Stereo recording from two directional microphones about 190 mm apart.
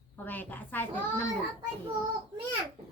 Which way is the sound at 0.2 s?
10° left (ahead or behind).